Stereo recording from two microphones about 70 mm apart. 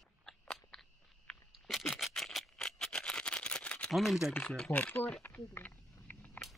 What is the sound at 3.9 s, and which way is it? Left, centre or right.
Speech, centre.